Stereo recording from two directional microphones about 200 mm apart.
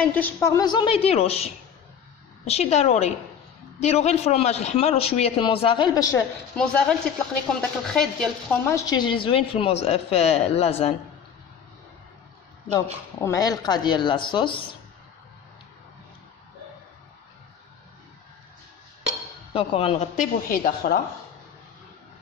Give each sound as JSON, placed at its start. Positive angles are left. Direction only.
{"t": 0.0, "sound": "a woman's voice", "side_deg": 10}
{"t": 6.5, "sound": "a woman's voice", "side_deg": 5}
{"t": 12.7, "sound": "a woman's voice", "side_deg": 15}
{"t": 19.5, "sound": "a man's voice", "side_deg": 30}